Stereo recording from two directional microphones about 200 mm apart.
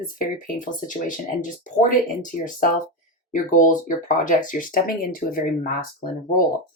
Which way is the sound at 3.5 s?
40° left (ahead or behind).